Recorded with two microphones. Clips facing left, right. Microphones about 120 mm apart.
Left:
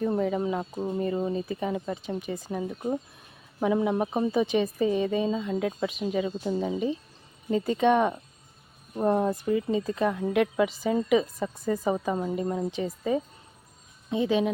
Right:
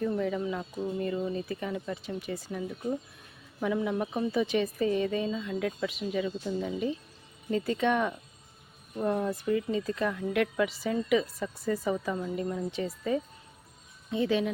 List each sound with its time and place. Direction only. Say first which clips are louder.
0.0 s speech: left 3 dB; 35° left (ahead or behind)
1.3 s speech: left 4 dB; 20° left (ahead or behind)
2.1 s speech: left 3 dB; 20° left (ahead or behind)
2.5 s speech: left 4 dB; 35° left (ahead or behind)
4.4 s speech: left 3 dB; 15° left (ahead or behind)
9.0 s speech: left 5 dB; 35° left (ahead or behind)
9.5 s speech: left 3 dB; 25° left (ahead or behind)
11.6 s speech: left 2 dB; 15° left (ahead or behind)
11.9 s speech: left 4 dB; 35° left (ahead or behind)
12.7 s speech: left 3 dB; 15° left (ahead or behind)